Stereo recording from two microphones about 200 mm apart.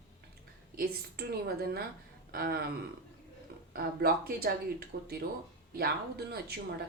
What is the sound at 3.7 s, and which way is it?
Speech, 50° right (ahead or behind).